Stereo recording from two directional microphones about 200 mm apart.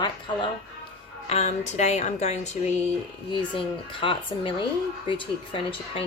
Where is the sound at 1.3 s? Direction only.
35° left (ahead or behind).